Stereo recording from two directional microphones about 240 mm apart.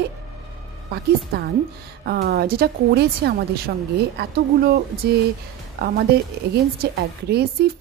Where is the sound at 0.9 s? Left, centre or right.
Right.